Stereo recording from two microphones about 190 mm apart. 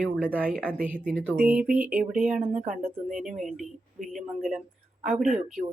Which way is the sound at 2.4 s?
45° right (ahead or behind).